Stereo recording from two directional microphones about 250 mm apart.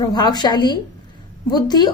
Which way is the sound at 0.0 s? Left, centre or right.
Centre.